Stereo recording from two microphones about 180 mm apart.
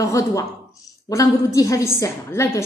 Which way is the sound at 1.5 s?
20° left (ahead or behind).